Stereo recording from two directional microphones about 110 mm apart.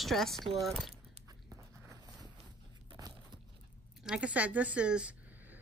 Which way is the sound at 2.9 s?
35° right (ahead or behind).